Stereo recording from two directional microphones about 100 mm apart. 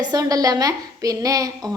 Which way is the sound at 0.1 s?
40° right (ahead or behind).